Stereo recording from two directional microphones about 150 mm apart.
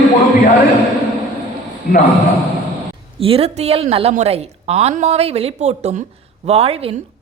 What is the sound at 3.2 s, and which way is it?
A woman's voice, 40° right (ahead or behind).